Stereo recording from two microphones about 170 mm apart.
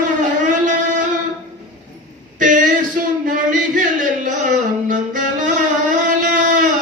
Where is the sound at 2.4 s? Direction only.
50° right (ahead or behind).